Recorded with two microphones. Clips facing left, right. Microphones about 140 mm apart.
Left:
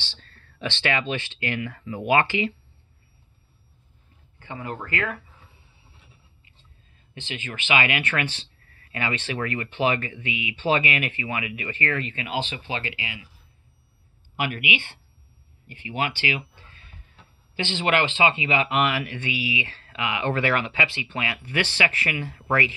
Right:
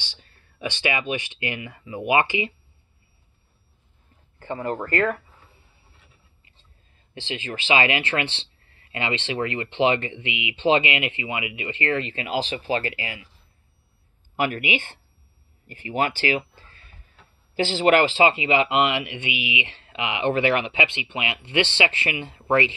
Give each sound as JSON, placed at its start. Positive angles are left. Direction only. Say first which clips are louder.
{"t": 0.0, "sound": "speech", "louder": "left 1 dB", "side_deg": -15}
{"t": 4.4, "sound": "speech", "louder": "right 6 dB", "side_deg": -45}
{"t": 7.2, "sound": "speech", "louder": "right 3 dB", "side_deg": -30}
{"t": 14.3, "sound": "speech", "louder": "right 3 dB", "side_deg": -40}